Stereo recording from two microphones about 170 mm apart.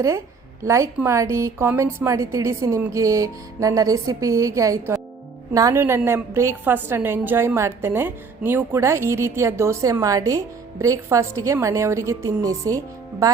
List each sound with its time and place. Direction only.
0.6 s a woman's voice: 15° right (ahead or behind)